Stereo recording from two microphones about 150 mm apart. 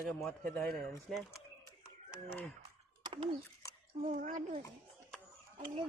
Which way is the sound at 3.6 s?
20° left (ahead or behind).